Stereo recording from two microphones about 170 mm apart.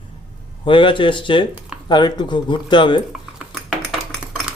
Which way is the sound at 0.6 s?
30° left (ahead or behind).